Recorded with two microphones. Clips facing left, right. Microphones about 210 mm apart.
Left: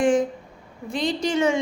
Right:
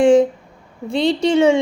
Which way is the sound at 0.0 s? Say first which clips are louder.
Right 8 dB; 25° right (ahead or behind).